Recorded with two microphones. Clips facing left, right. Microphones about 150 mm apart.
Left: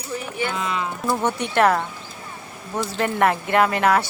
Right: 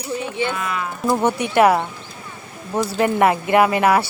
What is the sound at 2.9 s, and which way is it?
Speech, 5° right (ahead or behind).